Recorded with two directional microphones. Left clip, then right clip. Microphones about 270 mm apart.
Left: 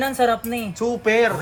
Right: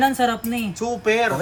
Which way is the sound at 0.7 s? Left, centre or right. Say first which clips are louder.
Left 2 dB; left.